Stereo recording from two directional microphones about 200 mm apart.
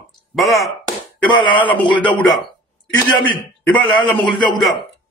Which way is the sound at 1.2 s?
25° left (ahead or behind).